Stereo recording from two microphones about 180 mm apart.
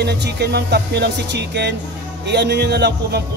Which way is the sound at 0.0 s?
65° right (ahead or behind).